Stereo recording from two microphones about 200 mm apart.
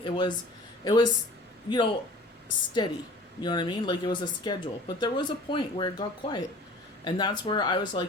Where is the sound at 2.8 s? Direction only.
20° left (ahead or behind).